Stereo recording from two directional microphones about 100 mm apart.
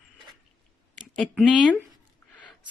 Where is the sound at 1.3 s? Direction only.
10° right (ahead or behind).